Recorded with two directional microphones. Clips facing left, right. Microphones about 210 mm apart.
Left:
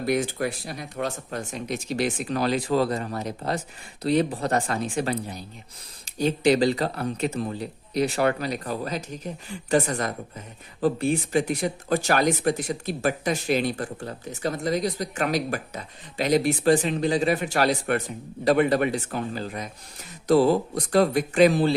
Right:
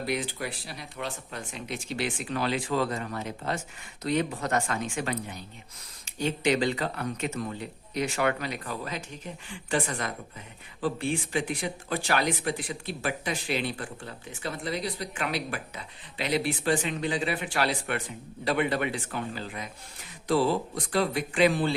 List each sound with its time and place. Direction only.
0.0 s speech: 45° left (ahead or behind)